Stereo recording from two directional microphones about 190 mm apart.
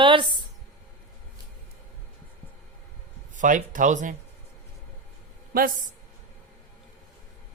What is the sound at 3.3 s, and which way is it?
Speech, 40° right (ahead or behind).